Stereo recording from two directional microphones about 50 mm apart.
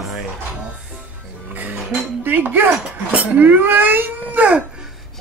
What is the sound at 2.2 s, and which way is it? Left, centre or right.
Dishes, right.